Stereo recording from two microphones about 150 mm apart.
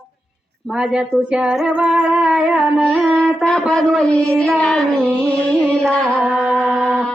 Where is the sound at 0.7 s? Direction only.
5° right (ahead or behind).